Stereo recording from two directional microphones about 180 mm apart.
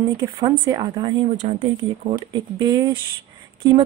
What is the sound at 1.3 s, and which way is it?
Speech, 35° right (ahead or behind).